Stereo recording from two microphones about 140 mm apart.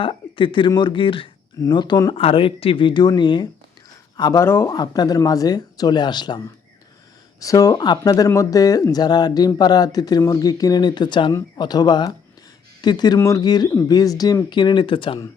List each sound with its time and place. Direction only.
0.0 s speech: 35° left (ahead or behind)
2.1 s speech: 40° left (ahead or behind)
4.2 s speech: 25° left (ahead or behind)
4.7 s speech: 30° left (ahead or behind)